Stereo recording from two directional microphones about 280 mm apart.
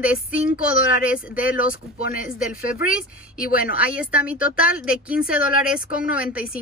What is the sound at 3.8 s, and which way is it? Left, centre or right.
Speech, centre.